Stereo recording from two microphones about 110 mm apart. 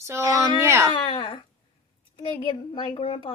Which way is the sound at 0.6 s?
25° right (ahead or behind).